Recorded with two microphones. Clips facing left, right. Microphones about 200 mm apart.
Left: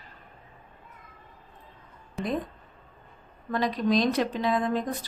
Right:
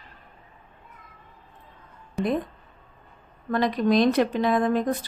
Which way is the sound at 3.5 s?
60° right (ahead or behind).